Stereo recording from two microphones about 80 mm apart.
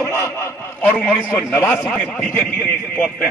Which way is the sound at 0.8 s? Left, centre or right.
Centre.